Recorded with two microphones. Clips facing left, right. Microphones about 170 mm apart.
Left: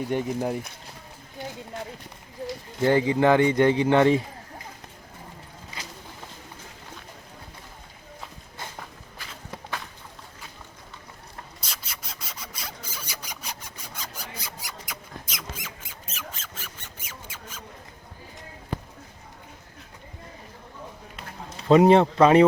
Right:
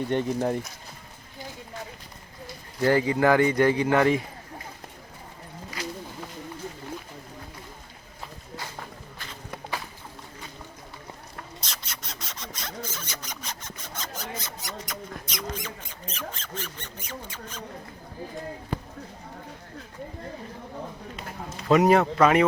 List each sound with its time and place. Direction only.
0.1 s speech: 10° left (ahead or behind)
2.8 s a man's voice: 20° left (ahead or behind)
11.6 s a sound: 5° left (ahead or behind)
21.7 s a man's voice: 30° left (ahead or behind)